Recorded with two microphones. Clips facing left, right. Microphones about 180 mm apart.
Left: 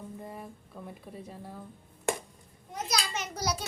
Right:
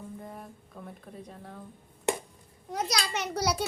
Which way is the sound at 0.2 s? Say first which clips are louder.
Left 1 dB; centre (ahead or behind).